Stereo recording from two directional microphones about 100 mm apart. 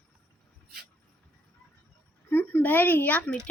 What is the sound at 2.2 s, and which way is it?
A woman's voice, 20° left (ahead or behind).